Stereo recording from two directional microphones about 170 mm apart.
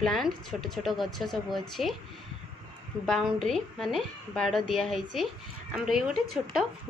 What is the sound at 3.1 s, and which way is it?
A woman's voice, centre (ahead or behind).